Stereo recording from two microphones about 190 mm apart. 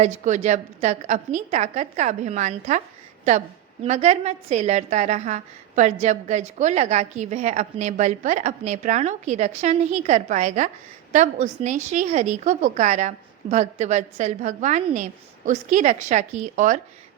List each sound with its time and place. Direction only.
0.0 s a woman's voice: 35° right (ahead or behind)
3.8 s a woman's voice: 35° right (ahead or behind)